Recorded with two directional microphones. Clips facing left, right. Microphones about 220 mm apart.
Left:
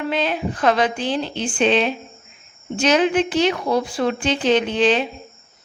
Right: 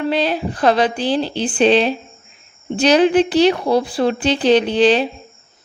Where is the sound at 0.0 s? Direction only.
35° right (ahead or behind).